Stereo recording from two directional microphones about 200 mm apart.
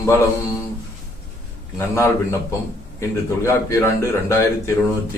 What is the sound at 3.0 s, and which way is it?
Speech, 15° left (ahead or behind).